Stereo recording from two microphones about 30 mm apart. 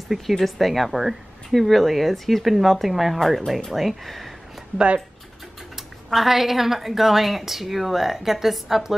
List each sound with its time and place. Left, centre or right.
0.3 s speech: centre
4.7 s speech: right
6.0 s a woman's voice: centre